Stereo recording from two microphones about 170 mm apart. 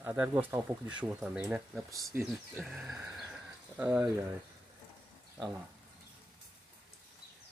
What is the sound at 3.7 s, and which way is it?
Speech, 10° right (ahead or behind).